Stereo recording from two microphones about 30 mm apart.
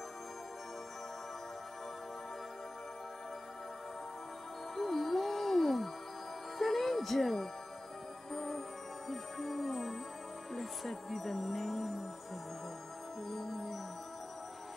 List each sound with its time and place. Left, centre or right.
4.7 s music: centre
9.1 s music: centre
13.3 s music: centre